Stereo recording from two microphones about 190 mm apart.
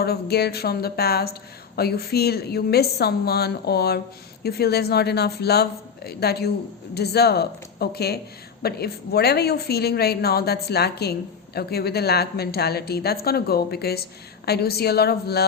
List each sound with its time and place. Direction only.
0.0 s a woman's voice: 55° left (ahead or behind)